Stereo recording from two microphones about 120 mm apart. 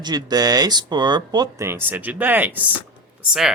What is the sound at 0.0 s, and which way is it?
Speech, 35° right (ahead or behind).